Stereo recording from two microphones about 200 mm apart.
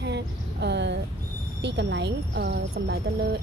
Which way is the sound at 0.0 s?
60° right (ahead or behind).